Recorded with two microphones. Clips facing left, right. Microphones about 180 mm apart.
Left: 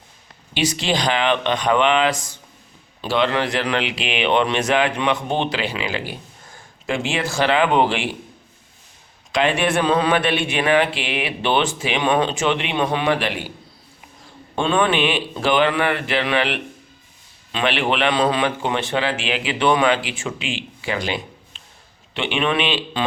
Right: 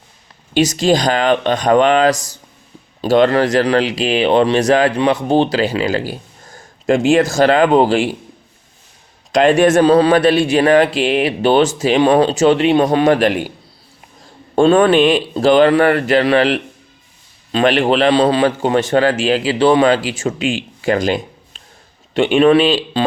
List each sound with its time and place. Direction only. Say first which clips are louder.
0.5 s speech: right 8 dB; 45° right (ahead or behind)
9.3 s speech: right 8 dB; 45° right (ahead or behind)
14.5 s speech: right 9 dB; 45° right (ahead or behind)